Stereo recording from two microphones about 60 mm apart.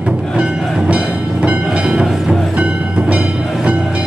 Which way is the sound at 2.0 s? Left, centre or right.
Centre.